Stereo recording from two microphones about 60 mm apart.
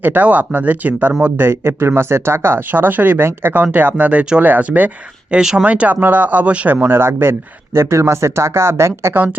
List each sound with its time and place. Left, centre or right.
0.0 s speech: right
1.4 s speech: right
5.4 s speech: centre
5.6 s speech: right